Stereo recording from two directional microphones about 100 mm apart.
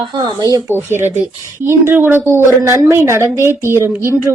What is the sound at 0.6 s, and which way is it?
A woman's voice, 25° right (ahead or behind).